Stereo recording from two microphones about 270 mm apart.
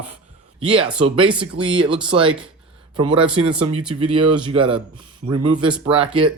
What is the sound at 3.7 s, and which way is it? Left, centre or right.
Speech, right.